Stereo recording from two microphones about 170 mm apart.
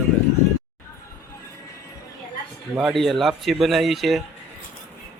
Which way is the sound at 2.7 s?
Centre (ahead or behind).